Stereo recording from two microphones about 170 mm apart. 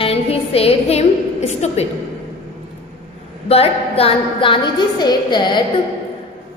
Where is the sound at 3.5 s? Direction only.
35° left (ahead or behind).